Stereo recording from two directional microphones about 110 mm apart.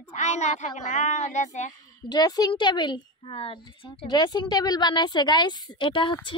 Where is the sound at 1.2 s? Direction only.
90° left.